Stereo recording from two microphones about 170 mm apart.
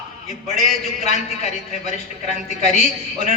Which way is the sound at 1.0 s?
40° left (ahead or behind).